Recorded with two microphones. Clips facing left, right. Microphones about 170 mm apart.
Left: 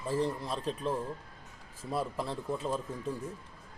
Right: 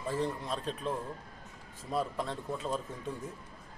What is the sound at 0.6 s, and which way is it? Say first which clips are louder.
Speech: left 4 dB; 30° left (ahead or behind).